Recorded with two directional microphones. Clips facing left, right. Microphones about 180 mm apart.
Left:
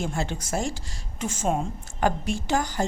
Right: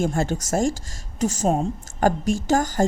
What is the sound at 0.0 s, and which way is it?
Speech, 45° right (ahead or behind).